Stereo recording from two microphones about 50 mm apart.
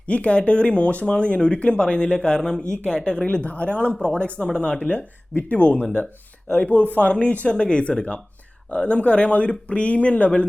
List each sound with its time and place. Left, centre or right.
0.1 s speech: left